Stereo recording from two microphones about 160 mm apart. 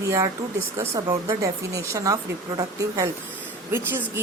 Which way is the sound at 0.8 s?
20° right (ahead or behind).